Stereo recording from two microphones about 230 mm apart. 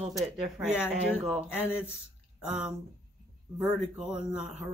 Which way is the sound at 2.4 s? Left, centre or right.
Centre.